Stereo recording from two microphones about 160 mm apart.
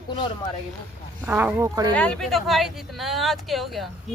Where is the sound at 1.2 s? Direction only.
10° right (ahead or behind).